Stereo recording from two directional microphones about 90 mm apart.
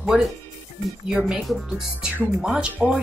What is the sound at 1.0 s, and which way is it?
Speech, 5° right (ahead or behind).